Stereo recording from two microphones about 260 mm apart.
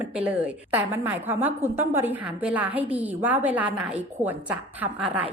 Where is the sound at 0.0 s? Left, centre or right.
Centre.